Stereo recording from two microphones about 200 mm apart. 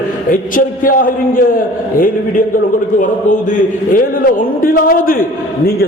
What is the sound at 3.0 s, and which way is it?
A man's voice, 40° left (ahead or behind).